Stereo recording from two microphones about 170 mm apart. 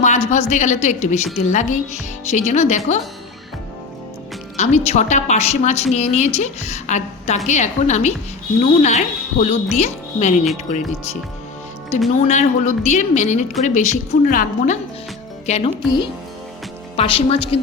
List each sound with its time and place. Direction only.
0.0 s a woman's voice: 45° left (ahead or behind)
4.5 s a woman's voice: 40° left (ahead or behind)
15.4 s a woman's voice: 35° left (ahead or behind)